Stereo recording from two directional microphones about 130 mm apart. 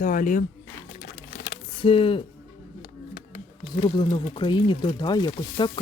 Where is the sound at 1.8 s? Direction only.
40° left (ahead or behind).